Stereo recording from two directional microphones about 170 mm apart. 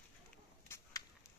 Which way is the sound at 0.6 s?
15° left (ahead or behind).